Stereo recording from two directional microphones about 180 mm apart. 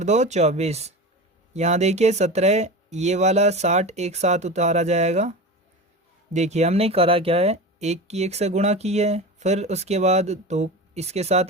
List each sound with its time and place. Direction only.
0.0 s speech: 40° right (ahead or behind)
6.3 s speech: 40° right (ahead or behind)